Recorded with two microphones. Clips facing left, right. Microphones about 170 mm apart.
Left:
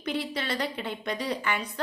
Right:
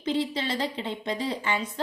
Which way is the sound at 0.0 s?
25° right (ahead or behind).